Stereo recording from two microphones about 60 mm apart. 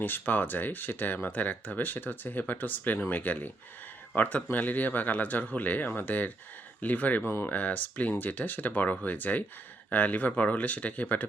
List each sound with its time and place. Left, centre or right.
0.0 s speech: left